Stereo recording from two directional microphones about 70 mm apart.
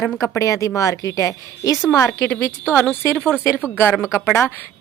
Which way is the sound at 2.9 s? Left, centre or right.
Centre.